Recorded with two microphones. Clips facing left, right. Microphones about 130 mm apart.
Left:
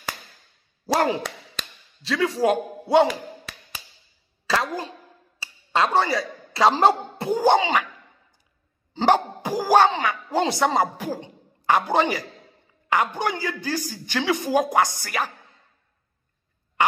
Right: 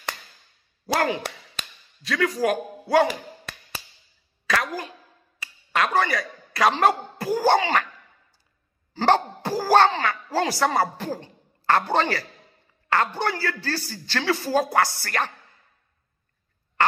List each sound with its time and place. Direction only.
0.9 s a man's voice: 30° left (ahead or behind)
4.5 s a woman's voice: 25° left (ahead or behind)
8.9 s a man's voice: 15° left (ahead or behind)